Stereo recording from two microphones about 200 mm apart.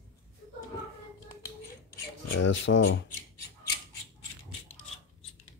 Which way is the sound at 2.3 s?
70° left (ahead or behind).